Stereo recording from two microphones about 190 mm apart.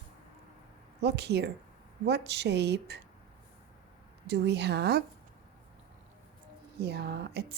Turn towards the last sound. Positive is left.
turn(degrees=-60)  # may be behind; listen again after turning